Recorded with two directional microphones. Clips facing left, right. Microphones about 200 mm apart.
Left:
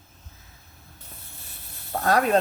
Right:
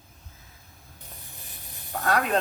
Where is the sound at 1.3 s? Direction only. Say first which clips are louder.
Right 1 dB; 15° right (ahead or behind).